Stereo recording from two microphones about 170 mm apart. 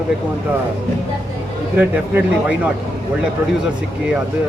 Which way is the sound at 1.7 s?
10° right (ahead or behind).